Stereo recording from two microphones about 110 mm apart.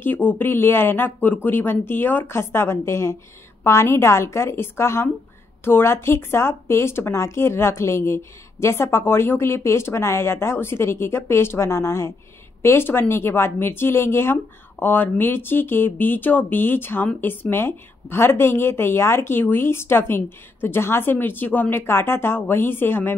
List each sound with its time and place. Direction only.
0.0 s speech: 15° left (ahead or behind)